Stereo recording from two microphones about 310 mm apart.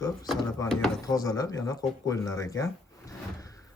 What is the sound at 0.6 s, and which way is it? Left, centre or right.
Speech, centre.